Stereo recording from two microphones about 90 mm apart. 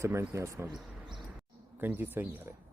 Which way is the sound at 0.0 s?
30° right (ahead or behind).